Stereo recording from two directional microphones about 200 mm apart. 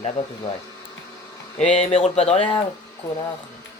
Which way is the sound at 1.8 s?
30° left (ahead or behind).